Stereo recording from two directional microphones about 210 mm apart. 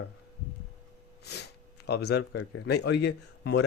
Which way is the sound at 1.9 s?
50° left (ahead or behind).